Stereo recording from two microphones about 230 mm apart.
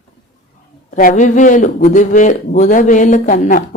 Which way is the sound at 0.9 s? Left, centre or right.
Left.